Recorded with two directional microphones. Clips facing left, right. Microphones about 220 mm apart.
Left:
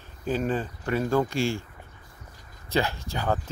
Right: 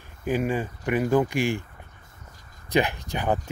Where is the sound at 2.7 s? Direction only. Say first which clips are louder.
Right 3 dB; 15° right (ahead or behind).